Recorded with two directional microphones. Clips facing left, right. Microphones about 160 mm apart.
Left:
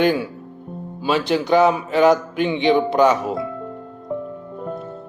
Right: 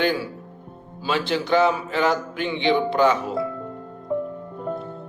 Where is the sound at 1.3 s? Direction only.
15° left (ahead or behind).